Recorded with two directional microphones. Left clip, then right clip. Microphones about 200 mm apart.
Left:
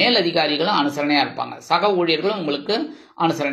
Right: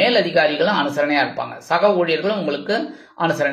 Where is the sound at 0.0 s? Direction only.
25° left (ahead or behind).